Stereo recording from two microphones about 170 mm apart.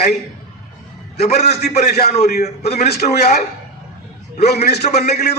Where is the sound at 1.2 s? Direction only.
40° left (ahead or behind).